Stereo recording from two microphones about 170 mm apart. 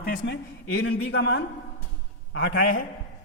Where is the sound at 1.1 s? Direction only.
90° left.